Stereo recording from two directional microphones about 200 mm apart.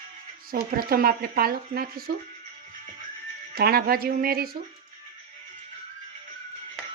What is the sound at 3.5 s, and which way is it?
Speech, 50° right (ahead or behind).